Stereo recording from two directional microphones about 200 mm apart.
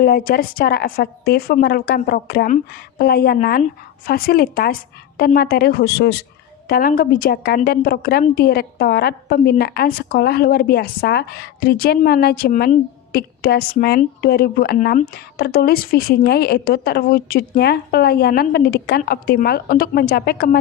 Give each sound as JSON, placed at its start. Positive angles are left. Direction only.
{"t": 0.0, "sound": "a woman's voice", "side_deg": 50}